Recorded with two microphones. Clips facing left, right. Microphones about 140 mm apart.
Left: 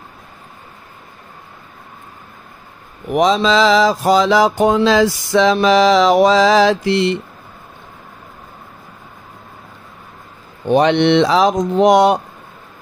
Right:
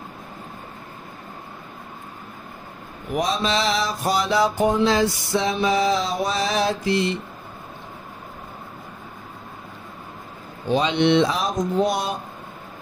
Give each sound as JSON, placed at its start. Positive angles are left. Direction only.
{"t": 3.1, "sound": "mantra", "side_deg": 90}
{"t": 10.7, "sound": "speech", "side_deg": 65}